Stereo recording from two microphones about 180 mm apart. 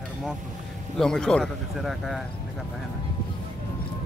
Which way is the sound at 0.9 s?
5° left (ahead or behind).